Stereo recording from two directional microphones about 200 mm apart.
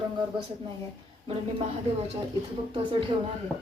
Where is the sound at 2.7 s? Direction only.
25° right (ahead or behind).